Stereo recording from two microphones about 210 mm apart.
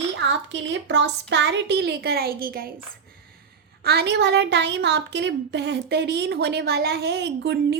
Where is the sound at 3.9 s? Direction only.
50° right (ahead or behind).